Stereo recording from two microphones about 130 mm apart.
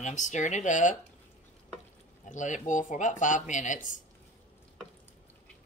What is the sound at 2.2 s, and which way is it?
Speech, 75° left (ahead or behind).